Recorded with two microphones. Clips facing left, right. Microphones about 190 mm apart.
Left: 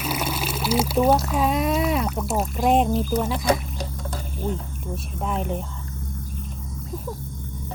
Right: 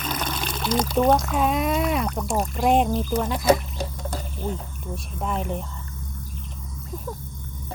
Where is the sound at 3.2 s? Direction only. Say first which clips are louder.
Right 2 dB; centre (ahead or behind).